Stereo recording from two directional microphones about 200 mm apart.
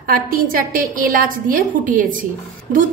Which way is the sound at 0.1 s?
45° right (ahead or behind).